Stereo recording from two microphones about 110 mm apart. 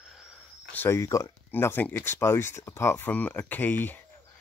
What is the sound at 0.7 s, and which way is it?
Speech, 20° left (ahead or behind).